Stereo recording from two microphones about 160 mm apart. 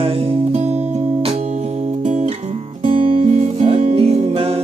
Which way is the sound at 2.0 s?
45° right (ahead or behind).